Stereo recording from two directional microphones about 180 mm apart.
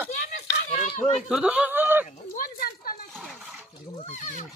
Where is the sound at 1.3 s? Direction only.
5° right (ahead or behind).